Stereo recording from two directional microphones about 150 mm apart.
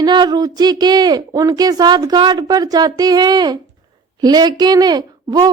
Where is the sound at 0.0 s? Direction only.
30° right (ahead or behind).